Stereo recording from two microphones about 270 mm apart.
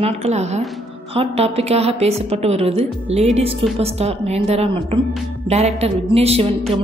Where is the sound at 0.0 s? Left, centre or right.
Right.